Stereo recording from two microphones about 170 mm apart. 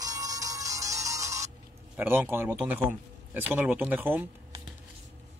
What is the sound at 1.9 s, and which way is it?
Speech, 15° right (ahead or behind).